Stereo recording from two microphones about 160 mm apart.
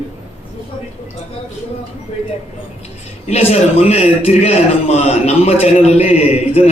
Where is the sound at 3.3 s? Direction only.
40° left (ahead or behind).